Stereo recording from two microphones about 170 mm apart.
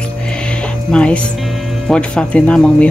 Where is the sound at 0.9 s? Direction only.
5° left (ahead or behind).